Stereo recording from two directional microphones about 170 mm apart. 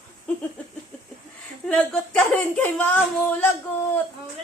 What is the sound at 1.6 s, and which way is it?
Speech, 5° left (ahead or behind).